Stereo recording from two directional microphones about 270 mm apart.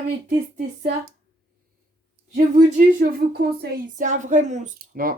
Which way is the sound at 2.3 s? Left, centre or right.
Right.